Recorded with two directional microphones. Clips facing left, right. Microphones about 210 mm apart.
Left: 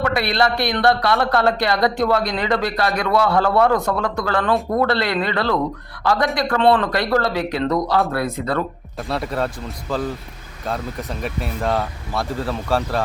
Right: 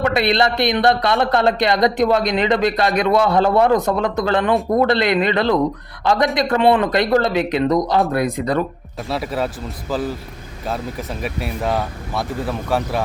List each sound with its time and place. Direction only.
0.0 s speech: 20° right (ahead or behind)
9.0 s speech: 5° right (ahead or behind)